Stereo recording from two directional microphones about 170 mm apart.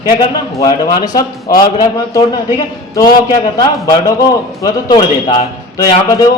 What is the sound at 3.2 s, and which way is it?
A man's voice, 20° left (ahead or behind).